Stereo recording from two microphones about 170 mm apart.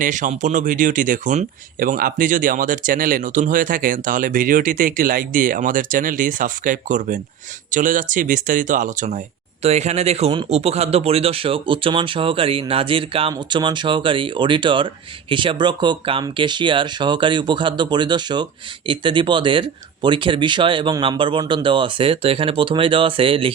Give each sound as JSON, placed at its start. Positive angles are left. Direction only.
{"t": 0.0, "sound": "a man's voice", "side_deg": -50}